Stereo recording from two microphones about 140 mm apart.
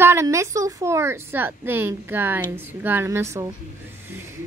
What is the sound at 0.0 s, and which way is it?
A woman's voice, 20° right (ahead or behind).